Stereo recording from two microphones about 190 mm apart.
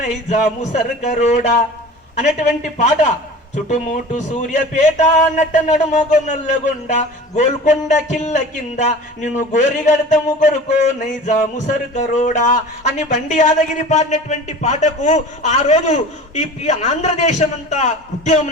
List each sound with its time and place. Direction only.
0.0 s speech: 35° left (ahead or behind)
3.5 s speech: 40° left (ahead or behind)